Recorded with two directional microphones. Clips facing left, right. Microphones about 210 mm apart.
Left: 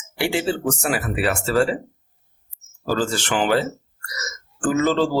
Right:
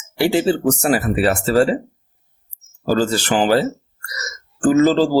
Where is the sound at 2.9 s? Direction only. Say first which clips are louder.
Right 5 dB; 35° right (ahead or behind).